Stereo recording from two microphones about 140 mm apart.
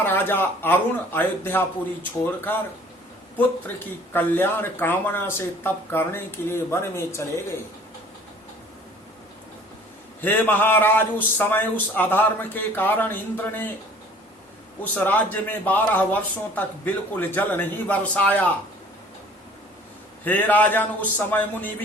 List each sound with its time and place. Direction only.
0.0 s a man's voice: 15° left (ahead or behind)
4.1 s a man's voice: 15° left (ahead or behind)
10.2 s a man's voice: 15° left (ahead or behind)
14.9 s a man's voice: 10° left (ahead or behind)
20.2 s a man's voice: 15° left (ahead or behind)